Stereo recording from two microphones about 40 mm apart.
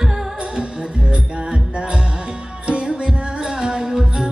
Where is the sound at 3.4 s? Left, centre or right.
Centre.